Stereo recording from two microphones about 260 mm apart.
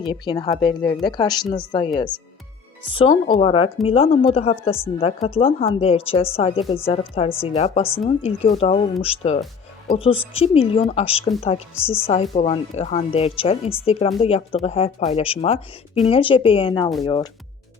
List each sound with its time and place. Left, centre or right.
0.0 s speech: centre
2.9 s a woman's voice: centre